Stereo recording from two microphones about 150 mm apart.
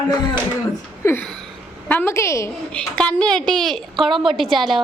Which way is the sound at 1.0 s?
20° left (ahead or behind).